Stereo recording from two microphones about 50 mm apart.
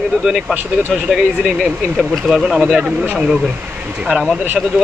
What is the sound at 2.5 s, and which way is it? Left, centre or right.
Speech, centre.